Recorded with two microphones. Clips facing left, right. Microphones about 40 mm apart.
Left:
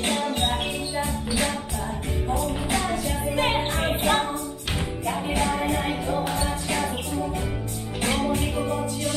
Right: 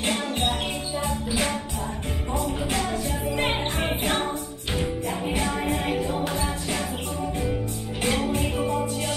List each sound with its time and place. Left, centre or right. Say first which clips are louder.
3.0 s music: left 1 dB; left
5.4 s music: left 5 dB; centre
8.2 s music: left 1 dB; left